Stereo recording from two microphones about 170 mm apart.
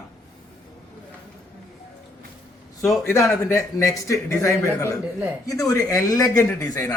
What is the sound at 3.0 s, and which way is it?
A man's voice, 15° left (ahead or behind).